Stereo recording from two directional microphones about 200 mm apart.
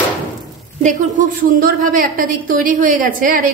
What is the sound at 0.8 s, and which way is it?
A woman's voice, 45° right (ahead or behind).